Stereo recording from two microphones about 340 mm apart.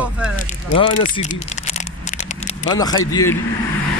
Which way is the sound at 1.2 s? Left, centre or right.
Centre.